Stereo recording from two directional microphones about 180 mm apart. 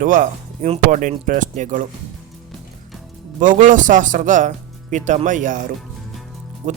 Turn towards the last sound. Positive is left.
turn(degrees=-45)  # may be behind; listen again after turning